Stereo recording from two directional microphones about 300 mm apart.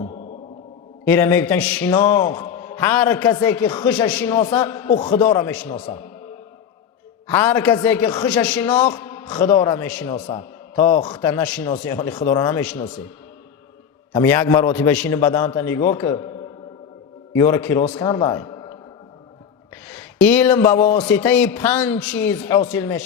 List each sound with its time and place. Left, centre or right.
1.0 s a man's voice: centre
7.3 s a man's voice: centre
14.1 s a man's voice: centre
17.3 s a man's voice: centre
19.9 s a man's voice: centre